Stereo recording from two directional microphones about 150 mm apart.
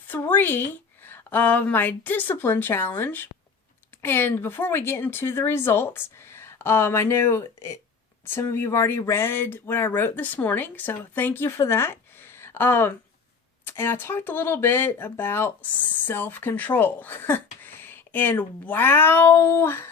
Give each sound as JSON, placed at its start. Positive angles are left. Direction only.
{"t": 0.1, "sound": "speech", "side_deg": 10}